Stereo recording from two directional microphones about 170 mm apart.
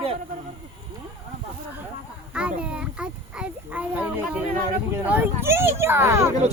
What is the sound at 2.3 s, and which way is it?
A child's voice, 5° right (ahead or behind).